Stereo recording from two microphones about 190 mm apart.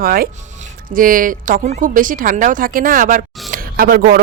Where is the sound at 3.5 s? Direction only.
50° right (ahead or behind).